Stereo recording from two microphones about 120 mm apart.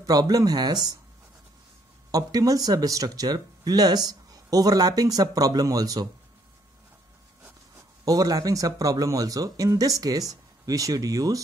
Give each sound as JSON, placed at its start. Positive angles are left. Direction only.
{"t": 0.0, "sound": "speech", "side_deg": -30}
{"t": 2.0, "sound": "speech", "side_deg": -30}
{"t": 8.0, "sound": "speech", "side_deg": -30}